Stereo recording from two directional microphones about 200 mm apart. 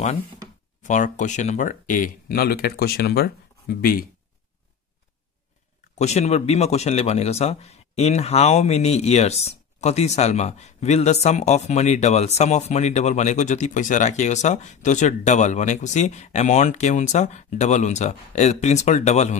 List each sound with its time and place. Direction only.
0.8 s speech: 40° left (ahead or behind)
5.9 s speech: 35° left (ahead or behind)